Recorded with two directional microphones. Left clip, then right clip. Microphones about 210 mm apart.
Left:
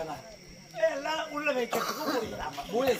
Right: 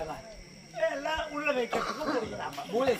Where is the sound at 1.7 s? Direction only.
55° left (ahead or behind).